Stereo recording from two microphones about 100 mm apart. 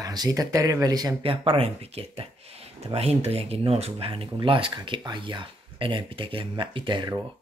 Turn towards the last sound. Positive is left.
turn(degrees=-50)  # may be behind; listen again after turning